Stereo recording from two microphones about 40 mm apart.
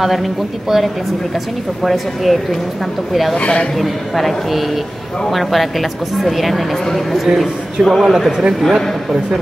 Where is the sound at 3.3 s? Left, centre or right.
Left.